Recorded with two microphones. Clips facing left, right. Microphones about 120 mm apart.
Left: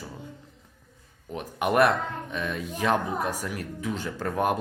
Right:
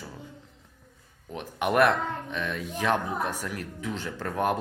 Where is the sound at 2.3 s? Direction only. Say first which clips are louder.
Left 1 dB; 35° left (ahead or behind).